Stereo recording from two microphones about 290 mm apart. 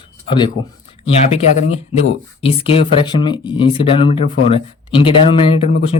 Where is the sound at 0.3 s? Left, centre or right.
Centre.